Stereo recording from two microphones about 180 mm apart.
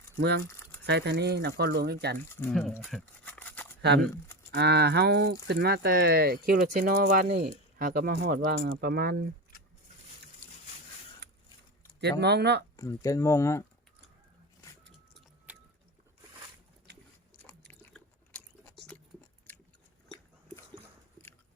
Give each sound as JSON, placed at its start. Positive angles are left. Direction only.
{"t": 0.2, "sound": "speech", "side_deg": -70}
{"t": 2.5, "sound": "speech", "side_deg": 0}
{"t": 2.7, "sound": "a sound", "side_deg": 10}
{"t": 4.5, "sound": "speech", "side_deg": -65}
{"t": 12.2, "sound": "speech", "side_deg": -70}
{"t": 12.7, "sound": "speech", "side_deg": 15}
{"t": 15.5, "sound": "a sound", "side_deg": -10}
{"t": 17.7, "sound": "chewing", "side_deg": 10}
{"t": 19.5, "sound": "a sound", "side_deg": 10}